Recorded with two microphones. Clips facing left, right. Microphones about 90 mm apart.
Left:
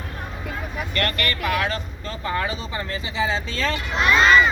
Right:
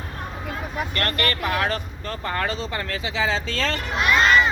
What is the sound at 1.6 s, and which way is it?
Speech, 55° right (ahead or behind).